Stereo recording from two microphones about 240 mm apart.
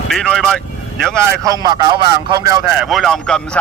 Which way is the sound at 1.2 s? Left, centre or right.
Centre.